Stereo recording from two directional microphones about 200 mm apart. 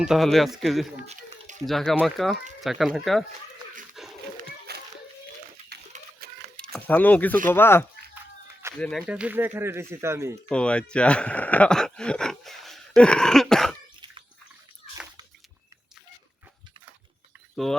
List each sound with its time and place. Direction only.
0.0 s speech: centre (ahead or behind)
4.0 s dog: centre (ahead or behind)
4.4 s children playing: 50° right (ahead or behind)
5.9 s a sound: 35° right (ahead or behind)
6.7 s speech: 10° left (ahead or behind); by 10.3 s 15° right (ahead or behind)
10.5 s speech: 5° left (ahead or behind)
17.5 s speech: centre (ahead or behind)